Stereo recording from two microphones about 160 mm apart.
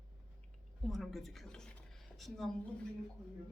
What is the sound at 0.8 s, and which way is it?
Speech, centre (ahead or behind).